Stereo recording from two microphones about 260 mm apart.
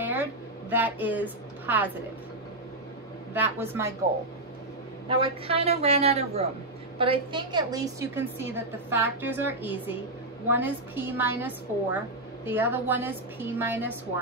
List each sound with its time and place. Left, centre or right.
0.0 s a sound: centre
3.3 s a woman's voice: centre
5.0 s a woman's voice: right